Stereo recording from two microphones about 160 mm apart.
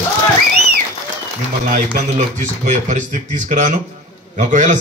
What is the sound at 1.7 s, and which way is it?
A man's voice, 55° right (ahead or behind).